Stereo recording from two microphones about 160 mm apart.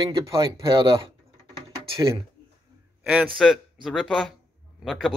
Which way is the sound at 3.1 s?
5° right (ahead or behind).